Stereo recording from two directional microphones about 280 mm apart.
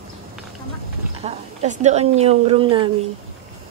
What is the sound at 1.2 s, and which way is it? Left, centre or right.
A woman's voice, right.